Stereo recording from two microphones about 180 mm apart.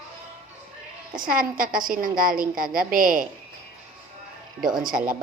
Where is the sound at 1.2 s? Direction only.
50° right (ahead or behind).